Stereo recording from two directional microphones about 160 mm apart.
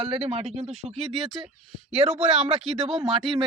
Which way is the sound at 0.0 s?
35° right (ahead or behind).